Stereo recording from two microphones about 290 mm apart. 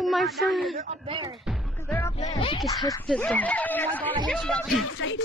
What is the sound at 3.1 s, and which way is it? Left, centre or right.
Speech, centre.